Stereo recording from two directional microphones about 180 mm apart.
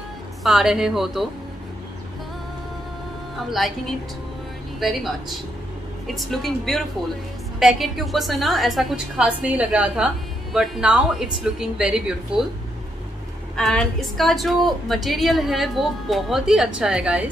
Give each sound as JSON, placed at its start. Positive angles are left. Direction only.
{"t": 0.4, "sound": "a woman's voice", "side_deg": 0}
{"t": 3.4, "sound": "a woman's voice", "side_deg": 0}
{"t": 4.7, "sound": "a woman's voice", "side_deg": 0}
{"t": 13.6, "sound": "a woman's voice", "side_deg": 0}